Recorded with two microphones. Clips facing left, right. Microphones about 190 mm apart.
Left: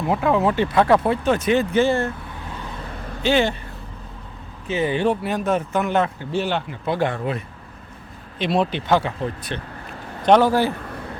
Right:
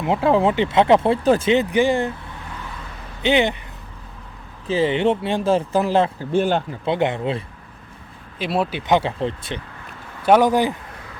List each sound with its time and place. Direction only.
0.0 s speech: 25° right (ahead or behind)
1.5 s speech: 15° right (ahead or behind)
3.2 s speech: 20° right (ahead or behind)
4.7 s speech: 25° right (ahead or behind)
6.3 s speech: 45° right (ahead or behind)
6.8 s speech: 20° right (ahead or behind)
8.4 s speech: 5° right (ahead or behind)
8.9 s speech: 25° right (ahead or behind)
10.2 s speech: 10° right (ahead or behind)